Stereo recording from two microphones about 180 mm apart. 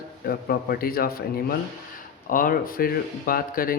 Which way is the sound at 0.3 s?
55° left (ahead or behind).